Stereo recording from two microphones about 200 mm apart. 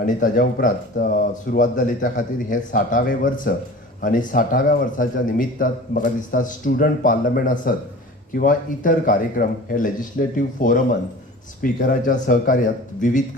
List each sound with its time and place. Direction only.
0.0 s a man's voice: 40° left (ahead or behind)